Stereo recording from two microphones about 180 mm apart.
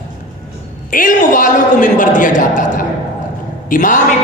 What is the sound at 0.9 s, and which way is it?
A man's voice, 50° left (ahead or behind).